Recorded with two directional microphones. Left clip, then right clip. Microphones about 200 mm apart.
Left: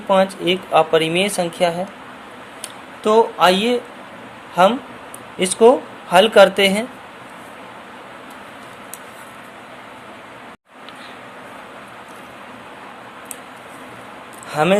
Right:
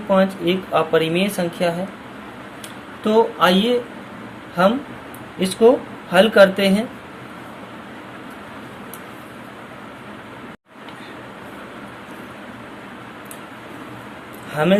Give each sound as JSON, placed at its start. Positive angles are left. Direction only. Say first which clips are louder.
{"t": 0.1, "sound": "speech", "louder": "left 2 dB", "side_deg": 25}
{"t": 3.0, "sound": "speech", "louder": "left 2 dB", "side_deg": 25}
{"t": 5.4, "sound": "speech", "louder": "left 2 dB", "side_deg": 30}
{"t": 14.5, "sound": "speech", "louder": "left 1 dB", "side_deg": 25}